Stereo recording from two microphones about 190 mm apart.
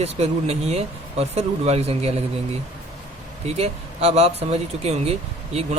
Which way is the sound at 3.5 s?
35° right (ahead or behind).